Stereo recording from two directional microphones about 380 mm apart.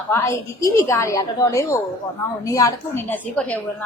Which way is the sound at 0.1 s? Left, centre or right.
Centre.